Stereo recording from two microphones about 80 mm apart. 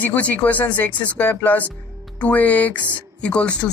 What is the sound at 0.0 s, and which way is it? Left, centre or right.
Speech, left.